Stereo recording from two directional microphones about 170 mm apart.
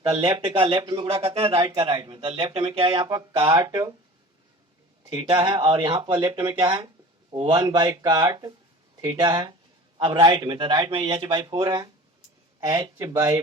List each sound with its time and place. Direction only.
0.3 s a man's voice: 30° right (ahead or behind)
5.0 s a man's voice: 30° right (ahead or behind)